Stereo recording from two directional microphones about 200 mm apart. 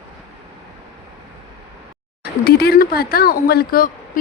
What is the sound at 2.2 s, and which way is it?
Speech, 50° left (ahead or behind).